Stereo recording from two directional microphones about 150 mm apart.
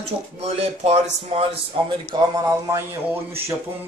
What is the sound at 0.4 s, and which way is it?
Speech, 45° right (ahead or behind).